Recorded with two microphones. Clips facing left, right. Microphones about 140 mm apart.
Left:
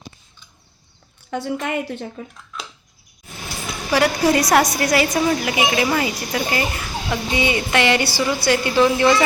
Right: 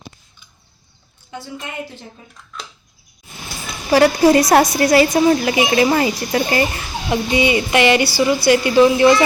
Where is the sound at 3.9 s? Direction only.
30° right (ahead or behind).